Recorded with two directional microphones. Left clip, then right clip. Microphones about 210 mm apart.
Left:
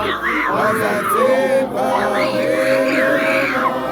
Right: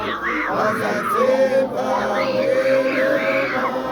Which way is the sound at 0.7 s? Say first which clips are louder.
Left 3 dB; 55° left (ahead or behind).